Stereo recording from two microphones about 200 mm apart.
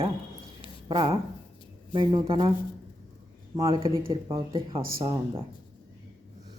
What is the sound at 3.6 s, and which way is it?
Speech, 25° right (ahead or behind).